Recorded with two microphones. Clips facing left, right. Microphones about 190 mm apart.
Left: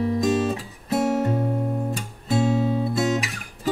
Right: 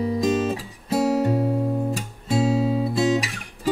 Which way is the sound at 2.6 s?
Centre (ahead or behind).